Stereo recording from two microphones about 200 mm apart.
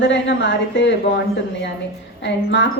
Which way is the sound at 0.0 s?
65° left (ahead or behind).